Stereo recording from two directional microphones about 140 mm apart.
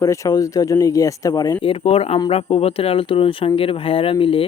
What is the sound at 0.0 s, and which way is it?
Speech, 25° left (ahead or behind).